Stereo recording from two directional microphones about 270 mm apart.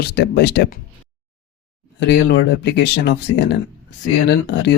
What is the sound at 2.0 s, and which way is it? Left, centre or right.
Speech, left.